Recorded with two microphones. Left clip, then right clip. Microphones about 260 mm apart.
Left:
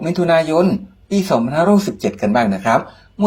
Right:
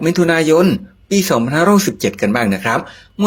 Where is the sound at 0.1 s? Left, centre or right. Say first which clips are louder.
Right 1 dB; right.